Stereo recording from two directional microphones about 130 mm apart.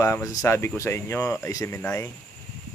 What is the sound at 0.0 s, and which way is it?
Speech, 25° left (ahead or behind).